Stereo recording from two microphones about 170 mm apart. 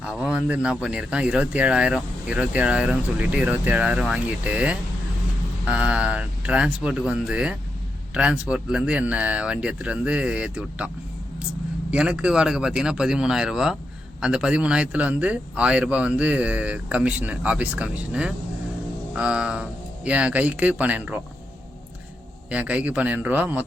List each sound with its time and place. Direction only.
0.0 s speech: 5° right (ahead or behind)
22.4 s speech: 5° right (ahead or behind)